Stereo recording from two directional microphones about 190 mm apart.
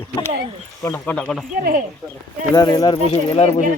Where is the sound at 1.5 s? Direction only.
45° right (ahead or behind).